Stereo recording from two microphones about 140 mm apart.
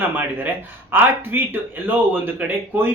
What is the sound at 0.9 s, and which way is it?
Speech, 15° right (ahead or behind).